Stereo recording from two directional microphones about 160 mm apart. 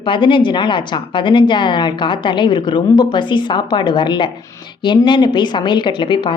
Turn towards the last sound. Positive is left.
turn(degrees=30)  # may be behind; listen again after turning